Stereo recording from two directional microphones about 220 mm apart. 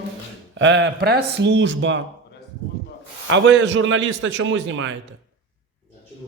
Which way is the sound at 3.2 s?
55° right (ahead or behind).